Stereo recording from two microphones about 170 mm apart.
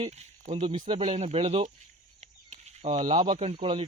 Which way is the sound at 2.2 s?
40° right (ahead or behind).